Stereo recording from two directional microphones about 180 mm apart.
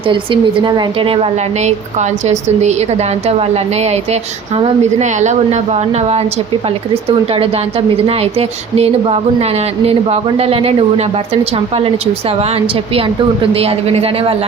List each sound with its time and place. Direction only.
0.0 s a woman's voice: 30° right (ahead or behind)